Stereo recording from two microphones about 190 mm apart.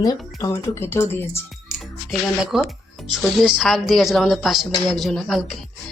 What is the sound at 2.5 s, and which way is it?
Speech, centre (ahead or behind).